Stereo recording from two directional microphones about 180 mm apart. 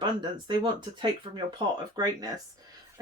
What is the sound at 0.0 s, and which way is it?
Speech, 25° right (ahead or behind).